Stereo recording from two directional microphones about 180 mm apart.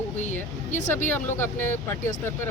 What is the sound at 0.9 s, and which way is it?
Speech, 10° left (ahead or behind).